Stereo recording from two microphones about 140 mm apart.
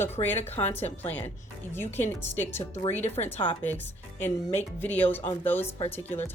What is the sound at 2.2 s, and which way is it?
Speech, 15° left (ahead or behind).